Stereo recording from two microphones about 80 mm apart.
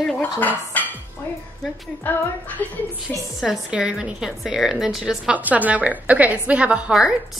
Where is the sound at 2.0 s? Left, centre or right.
Left.